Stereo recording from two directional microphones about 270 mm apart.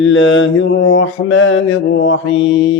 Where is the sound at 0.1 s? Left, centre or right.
Left.